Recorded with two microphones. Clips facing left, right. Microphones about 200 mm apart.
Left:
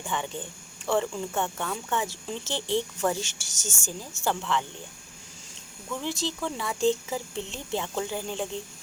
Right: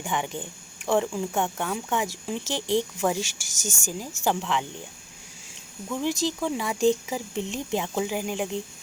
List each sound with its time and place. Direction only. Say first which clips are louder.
0.0 s speech: right 3 dB; 15° right (ahead or behind)
6.0 s speech: right 5 dB; 15° right (ahead or behind)